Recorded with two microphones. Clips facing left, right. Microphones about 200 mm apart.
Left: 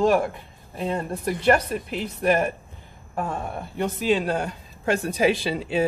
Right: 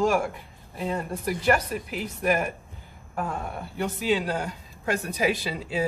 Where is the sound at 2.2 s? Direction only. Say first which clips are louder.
Left 4 dB; 30° left (ahead or behind).